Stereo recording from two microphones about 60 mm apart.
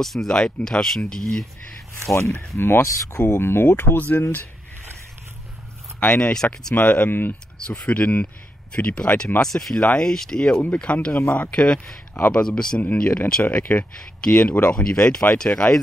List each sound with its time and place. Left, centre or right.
0.0 s speech: centre
2.5 s speech: left
5.9 s speech: centre
6.7 s speech: left
7.1 s speech: left
7.5 s speech: centre
9.4 s speech: centre
10.5 s speech: left
12.1 s speech: left
12.4 s speech: centre